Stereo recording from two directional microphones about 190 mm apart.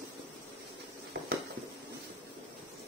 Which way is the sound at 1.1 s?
60° right (ahead or behind).